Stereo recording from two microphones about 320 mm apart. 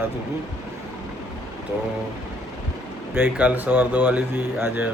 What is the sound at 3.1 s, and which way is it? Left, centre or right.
Speech, centre.